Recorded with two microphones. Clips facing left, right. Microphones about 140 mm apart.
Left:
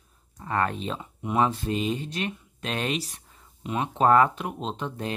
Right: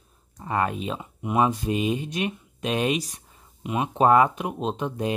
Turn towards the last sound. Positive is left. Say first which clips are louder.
# right 5 dB
turn(degrees=-15)  # may be behind; listen again after turning